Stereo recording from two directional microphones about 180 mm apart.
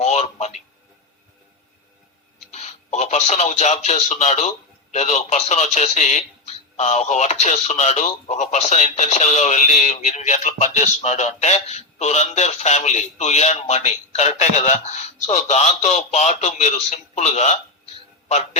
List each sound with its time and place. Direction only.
0.0 s a man's voice: 40° left (ahead or behind)
2.5 s speech: 40° left (ahead or behind)